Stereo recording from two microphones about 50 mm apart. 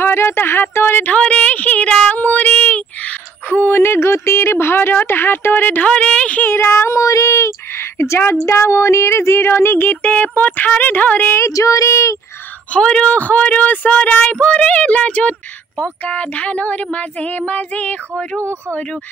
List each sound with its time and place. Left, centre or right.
0.0 s speech: left
1.1 s speech: left
2.0 s music: left
3.6 s speech: left
5.9 s speech: left
6.4 s speech: left
9.5 s speech: left
9.8 s speech: left
11.3 s child singing: left
12.7 s speech: left
18.4 s speech: right